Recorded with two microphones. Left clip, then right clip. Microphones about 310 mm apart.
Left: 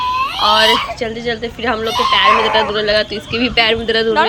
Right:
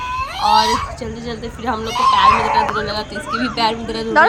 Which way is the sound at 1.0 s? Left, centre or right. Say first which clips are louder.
Left 7 dB; centre.